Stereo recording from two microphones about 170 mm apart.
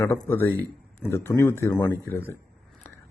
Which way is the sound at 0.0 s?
15° left (ahead or behind).